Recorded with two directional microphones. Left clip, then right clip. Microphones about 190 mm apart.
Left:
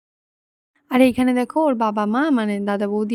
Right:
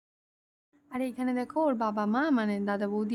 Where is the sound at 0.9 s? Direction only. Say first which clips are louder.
Left 16 dB; 50° left (ahead or behind).